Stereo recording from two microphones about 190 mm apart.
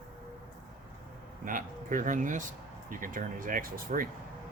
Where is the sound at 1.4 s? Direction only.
45° right (ahead or behind).